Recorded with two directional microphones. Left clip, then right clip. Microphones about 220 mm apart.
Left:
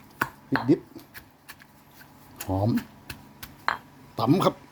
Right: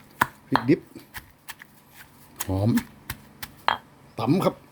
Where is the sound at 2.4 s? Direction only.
20° right (ahead or behind).